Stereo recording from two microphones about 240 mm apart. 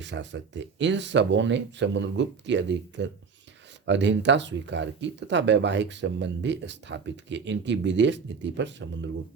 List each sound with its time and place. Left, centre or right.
0.0 s speech: right